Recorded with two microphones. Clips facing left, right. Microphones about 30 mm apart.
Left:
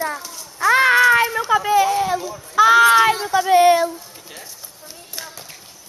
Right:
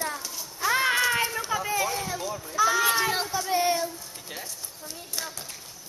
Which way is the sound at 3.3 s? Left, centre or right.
Left.